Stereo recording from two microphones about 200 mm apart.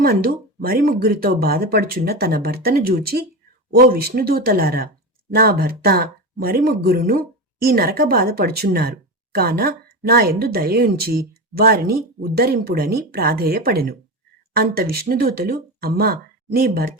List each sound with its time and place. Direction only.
0.0 s speech: 45° right (ahead or behind)